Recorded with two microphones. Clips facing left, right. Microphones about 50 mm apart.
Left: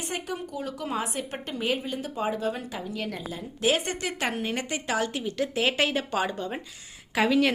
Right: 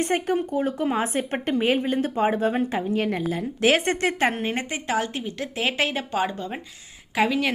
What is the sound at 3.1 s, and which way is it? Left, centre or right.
Speech, right.